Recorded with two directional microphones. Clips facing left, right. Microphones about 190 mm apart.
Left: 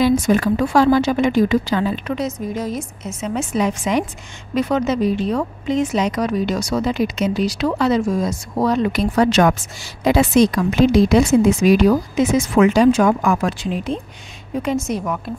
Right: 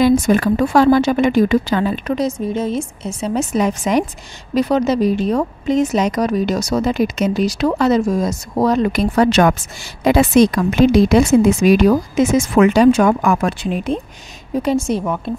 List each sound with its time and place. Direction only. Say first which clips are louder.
0.0 s speech: right 2 dB; 50° right (ahead or behind)
2.1 s a woman's voice: right 4 dB; 30° right (ahead or behind); by 13.9 s 60° right (ahead or behind)
14.6 s a woman's voice: right 4 dB; 30° right (ahead or behind)